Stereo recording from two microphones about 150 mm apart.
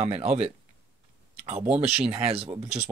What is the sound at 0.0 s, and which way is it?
Speech, 45° right (ahead or behind).